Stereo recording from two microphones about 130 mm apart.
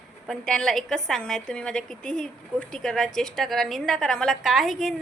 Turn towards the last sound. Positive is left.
turn(degrees=0)  # may be behind; listen again after turning